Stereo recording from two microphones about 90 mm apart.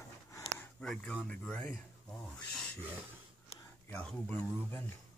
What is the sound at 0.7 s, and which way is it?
Speech, 10° left (ahead or behind).